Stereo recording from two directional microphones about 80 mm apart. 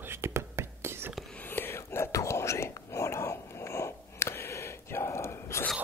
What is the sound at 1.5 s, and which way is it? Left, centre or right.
Whispering, left.